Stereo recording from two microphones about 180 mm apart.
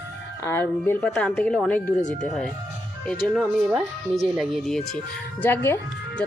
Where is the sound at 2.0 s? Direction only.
45° left (ahead or behind).